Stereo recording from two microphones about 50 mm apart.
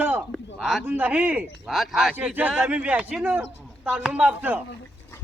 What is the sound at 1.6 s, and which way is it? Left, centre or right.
Speech, centre.